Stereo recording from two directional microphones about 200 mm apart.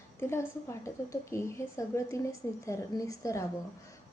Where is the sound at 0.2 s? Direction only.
15° left (ahead or behind).